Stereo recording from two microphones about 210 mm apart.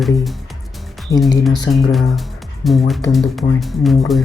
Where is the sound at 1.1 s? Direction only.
15° left (ahead or behind).